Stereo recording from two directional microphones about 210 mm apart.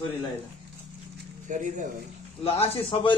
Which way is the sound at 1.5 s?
35° right (ahead or behind).